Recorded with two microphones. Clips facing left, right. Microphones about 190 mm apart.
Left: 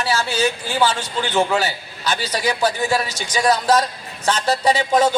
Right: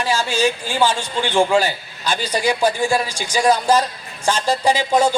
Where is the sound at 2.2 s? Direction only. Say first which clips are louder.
Right 2 dB; 10° left (ahead or behind).